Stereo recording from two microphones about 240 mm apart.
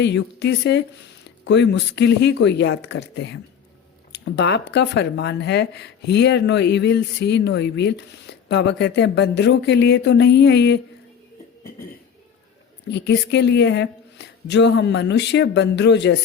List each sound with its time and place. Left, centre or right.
0.0 s speech: left
12.9 s speech: left